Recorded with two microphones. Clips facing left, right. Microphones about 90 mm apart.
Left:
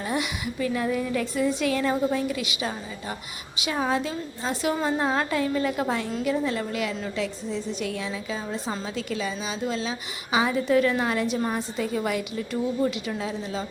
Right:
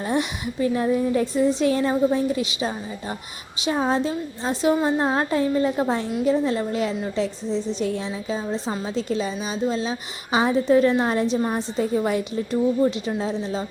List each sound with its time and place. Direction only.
0.0 s a woman's voice: 30° right (ahead or behind)